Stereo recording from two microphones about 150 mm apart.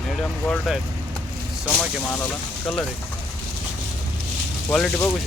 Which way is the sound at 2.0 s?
10° left (ahead or behind).